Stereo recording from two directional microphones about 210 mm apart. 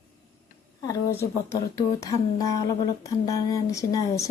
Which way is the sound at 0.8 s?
15° left (ahead or behind).